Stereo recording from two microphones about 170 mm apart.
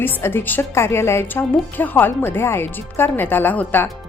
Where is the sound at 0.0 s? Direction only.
15° left (ahead or behind).